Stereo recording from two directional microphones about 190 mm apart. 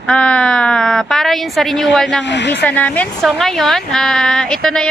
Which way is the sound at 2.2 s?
65° left (ahead or behind).